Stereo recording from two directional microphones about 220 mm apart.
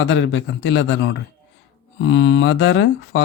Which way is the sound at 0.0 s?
60° left (ahead or behind).